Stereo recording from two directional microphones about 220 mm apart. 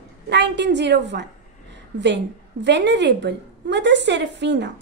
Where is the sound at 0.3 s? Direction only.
50° right (ahead or behind).